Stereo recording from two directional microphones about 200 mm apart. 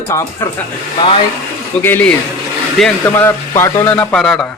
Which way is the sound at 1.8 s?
10° left (ahead or behind).